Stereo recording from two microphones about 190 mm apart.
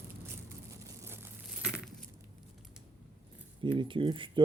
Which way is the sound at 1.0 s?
10° right (ahead or behind).